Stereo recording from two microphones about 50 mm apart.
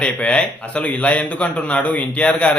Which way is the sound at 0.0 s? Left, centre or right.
Left.